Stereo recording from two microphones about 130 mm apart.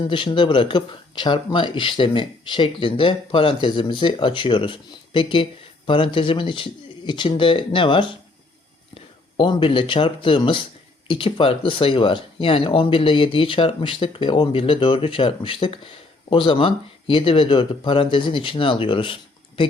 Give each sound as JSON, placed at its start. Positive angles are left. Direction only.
{"t": 0.0, "sound": "speech", "side_deg": 40}